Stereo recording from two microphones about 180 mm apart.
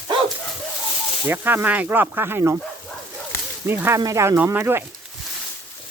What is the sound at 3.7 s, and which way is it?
Speech, 10° right (ahead or behind).